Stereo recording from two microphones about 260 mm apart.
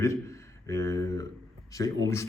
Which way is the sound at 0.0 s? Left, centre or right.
Centre.